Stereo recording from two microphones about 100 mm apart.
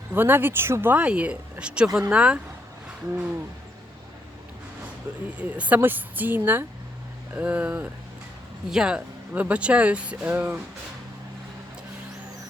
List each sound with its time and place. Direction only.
0.1 s speech: 20° right (ahead or behind)
5.1 s speech: 15° right (ahead or behind)